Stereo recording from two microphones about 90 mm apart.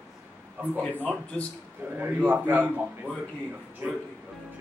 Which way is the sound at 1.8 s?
20° right (ahead or behind).